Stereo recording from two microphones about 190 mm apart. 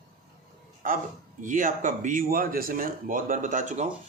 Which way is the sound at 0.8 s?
45° right (ahead or behind).